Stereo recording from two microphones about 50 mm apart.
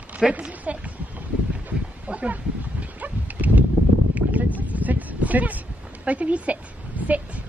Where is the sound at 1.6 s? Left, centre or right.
Right.